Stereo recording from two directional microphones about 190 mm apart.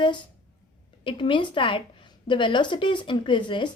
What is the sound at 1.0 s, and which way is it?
A woman's voice, 25° left (ahead or behind).